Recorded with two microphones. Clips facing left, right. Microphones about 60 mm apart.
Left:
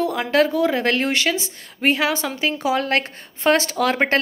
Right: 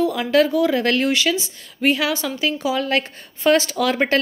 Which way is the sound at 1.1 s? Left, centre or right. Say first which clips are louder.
Right 1 dB; left.